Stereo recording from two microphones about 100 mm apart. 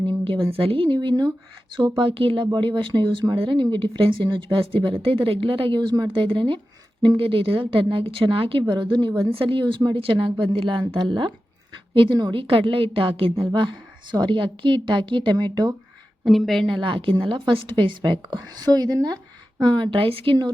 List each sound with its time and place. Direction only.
0.0 s a sound: 60° right (ahead or behind)
0.5 s speech: 70° right (ahead or behind); by 1.3 s 45° right (ahead or behind)
2.0 s a woman's voice: 60° right (ahead or behind)
6.1 s speech: 60° right (ahead or behind)
8.6 s a woman's voice: 50° right (ahead or behind)
9.3 s speech: 60° right (ahead or behind)
13.4 s a woman's voice: 50° right (ahead or behind)
16.2 s a woman's voice: centre (ahead or behind)
16.8 s a woman's voice: 55° right (ahead or behind)